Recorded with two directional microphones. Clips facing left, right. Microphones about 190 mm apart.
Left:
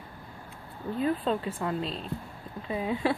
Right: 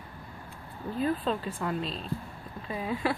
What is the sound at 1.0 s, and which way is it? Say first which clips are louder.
Speech: left 1 dB; 25° left (ahead or behind).